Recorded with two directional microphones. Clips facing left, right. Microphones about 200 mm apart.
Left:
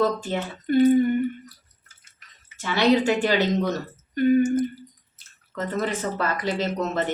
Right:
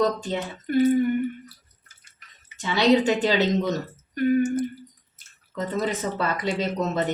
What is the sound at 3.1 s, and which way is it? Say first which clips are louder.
Speech: even; 20° right (ahead or behind).